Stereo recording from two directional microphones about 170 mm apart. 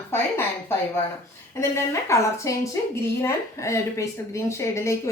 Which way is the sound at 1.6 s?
15° left (ahead or behind).